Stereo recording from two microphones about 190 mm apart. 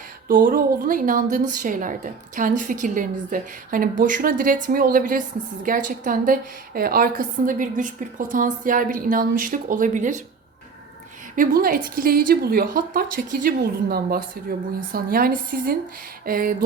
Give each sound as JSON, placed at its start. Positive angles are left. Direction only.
{"t": 0.3, "sound": "a woman's voice", "side_deg": -45}
{"t": 11.3, "sound": "a woman's voice", "side_deg": -50}